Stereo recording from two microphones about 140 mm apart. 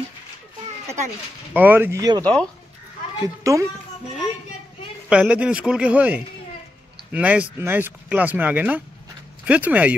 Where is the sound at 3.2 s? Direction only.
20° right (ahead or behind).